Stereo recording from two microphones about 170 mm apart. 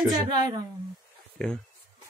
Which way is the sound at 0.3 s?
20° right (ahead or behind).